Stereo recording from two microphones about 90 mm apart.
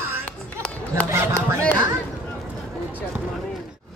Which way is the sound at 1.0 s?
35° right (ahead or behind).